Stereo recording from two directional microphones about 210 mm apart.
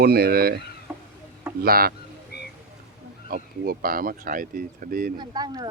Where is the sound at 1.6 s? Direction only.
45° right (ahead or behind).